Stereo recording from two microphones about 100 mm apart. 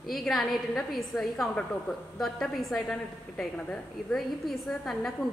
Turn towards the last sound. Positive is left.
turn(degrees=5)  # may be behind; listen again after turning